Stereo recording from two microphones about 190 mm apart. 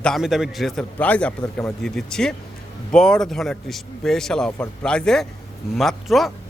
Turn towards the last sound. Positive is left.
turn(degrees=0)  # may be behind; listen again after turning